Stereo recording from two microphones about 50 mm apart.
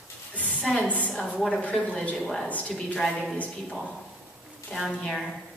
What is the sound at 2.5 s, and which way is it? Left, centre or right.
Speech, left.